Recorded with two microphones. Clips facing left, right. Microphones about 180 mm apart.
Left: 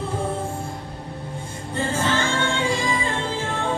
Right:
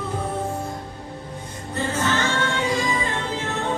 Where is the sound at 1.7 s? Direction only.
30° left (ahead or behind).